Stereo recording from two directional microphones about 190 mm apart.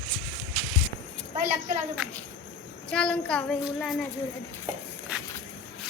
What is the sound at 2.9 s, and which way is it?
Child singing, 5° left (ahead or behind).